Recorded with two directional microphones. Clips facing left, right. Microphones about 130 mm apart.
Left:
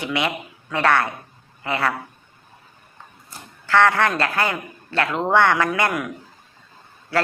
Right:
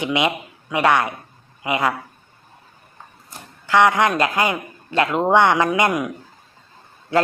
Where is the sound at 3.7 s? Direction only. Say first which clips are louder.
Right 2 dB; 15° right (ahead or behind).